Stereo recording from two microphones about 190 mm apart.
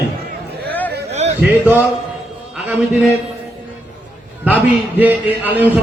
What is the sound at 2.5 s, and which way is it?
Speech, 5° right (ahead or behind).